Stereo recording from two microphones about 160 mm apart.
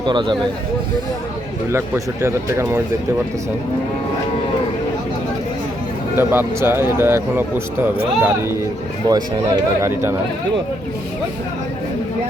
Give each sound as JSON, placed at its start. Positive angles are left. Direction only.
{"t": 0.0, "sound": "speech", "side_deg": -30}
{"t": 2.2, "sound": "speech", "side_deg": -15}
{"t": 6.1, "sound": "speech", "side_deg": -15}